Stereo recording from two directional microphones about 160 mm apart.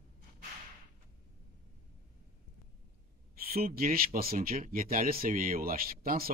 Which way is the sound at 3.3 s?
70° right (ahead or behind).